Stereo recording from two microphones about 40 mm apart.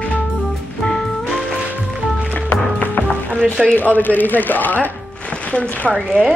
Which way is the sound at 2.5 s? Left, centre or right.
Left.